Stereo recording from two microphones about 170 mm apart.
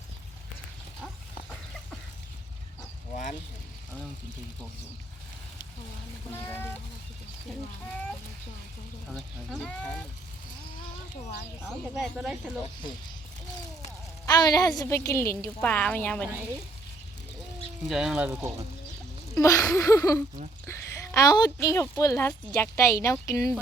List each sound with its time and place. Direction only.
6.3 s speech: 10° left (ahead or behind)
9.1 s speech: 5° left (ahead or behind)
11.6 s speech: centre (ahead or behind)
14.3 s a woman's voice: 25° left (ahead or behind); by 16.3 s 5° left (ahead or behind)
17.8 s speech: 5° right (ahead or behind)
19.4 s a woman's voice: 20° left (ahead or behind)